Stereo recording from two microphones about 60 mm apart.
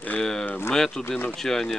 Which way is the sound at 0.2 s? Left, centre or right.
Centre.